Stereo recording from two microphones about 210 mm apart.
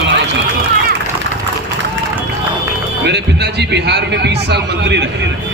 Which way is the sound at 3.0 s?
55° right (ahead or behind).